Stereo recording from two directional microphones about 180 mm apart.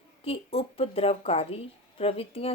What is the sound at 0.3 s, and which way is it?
Speech, 30° left (ahead or behind).